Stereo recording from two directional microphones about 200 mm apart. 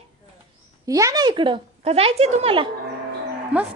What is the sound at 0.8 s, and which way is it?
A woman's voice, 15° right (ahead or behind).